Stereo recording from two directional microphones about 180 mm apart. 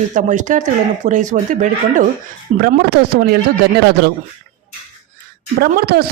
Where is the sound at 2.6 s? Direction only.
65° right (ahead or behind).